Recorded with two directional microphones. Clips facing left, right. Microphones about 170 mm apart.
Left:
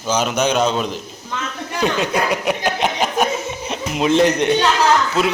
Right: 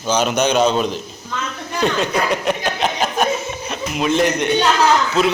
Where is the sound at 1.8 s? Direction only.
10° left (ahead or behind).